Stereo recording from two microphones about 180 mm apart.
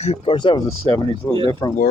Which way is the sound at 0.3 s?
25° left (ahead or behind).